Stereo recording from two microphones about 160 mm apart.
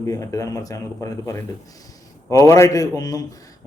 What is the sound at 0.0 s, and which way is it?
A man's voice, 20° left (ahead or behind).